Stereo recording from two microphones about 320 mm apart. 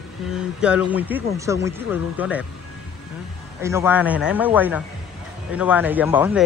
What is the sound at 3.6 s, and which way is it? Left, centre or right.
Speech, centre.